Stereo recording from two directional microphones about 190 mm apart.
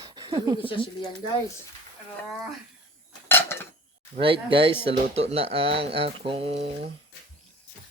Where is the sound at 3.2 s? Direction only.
10° left (ahead or behind).